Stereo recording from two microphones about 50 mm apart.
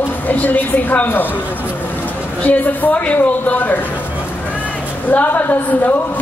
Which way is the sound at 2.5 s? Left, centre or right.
Left.